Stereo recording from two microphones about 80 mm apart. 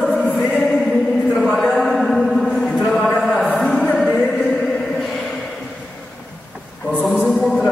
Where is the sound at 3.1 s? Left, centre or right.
Centre.